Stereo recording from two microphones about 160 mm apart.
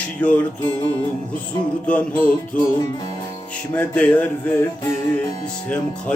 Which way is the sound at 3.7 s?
10° left (ahead or behind).